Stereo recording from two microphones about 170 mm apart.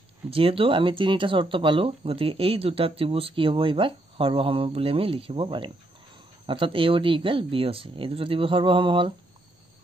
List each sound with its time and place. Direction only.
0.3 s speech: 30° right (ahead or behind)